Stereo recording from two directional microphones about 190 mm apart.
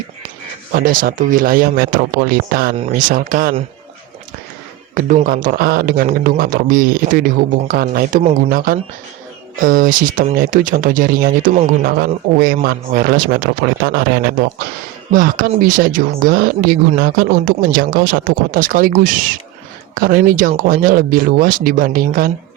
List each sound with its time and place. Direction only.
0.7 s speech: 50° right (ahead or behind)
4.9 s speech: 45° right (ahead or behind)